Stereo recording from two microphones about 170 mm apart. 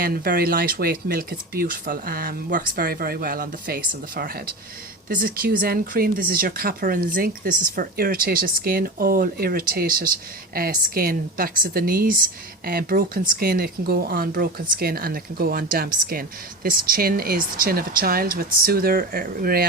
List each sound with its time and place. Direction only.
0.0 s speech: 60° right (ahead or behind)